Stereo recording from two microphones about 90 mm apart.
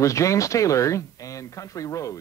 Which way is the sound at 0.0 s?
35° left (ahead or behind).